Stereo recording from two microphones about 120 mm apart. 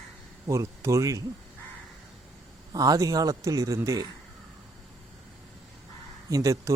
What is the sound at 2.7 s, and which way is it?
Speech, 30° right (ahead or behind).